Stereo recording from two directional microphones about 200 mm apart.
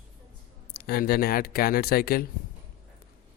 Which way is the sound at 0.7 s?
50° left (ahead or behind).